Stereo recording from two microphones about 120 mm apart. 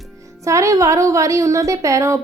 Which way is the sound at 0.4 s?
25° right (ahead or behind).